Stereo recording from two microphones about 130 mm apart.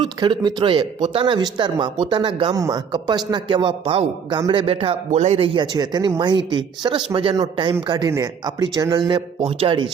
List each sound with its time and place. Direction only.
0.0 s speech: 35° right (ahead or behind)
2.6 s speech: 30° right (ahead or behind)
5.1 s speech: 55° right (ahead or behind)
5.5 s a man's voice: 35° right (ahead or behind)
9.4 s speech: 50° right (ahead or behind)